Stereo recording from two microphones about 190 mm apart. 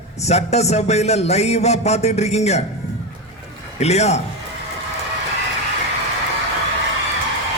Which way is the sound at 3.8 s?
35° left (ahead or behind).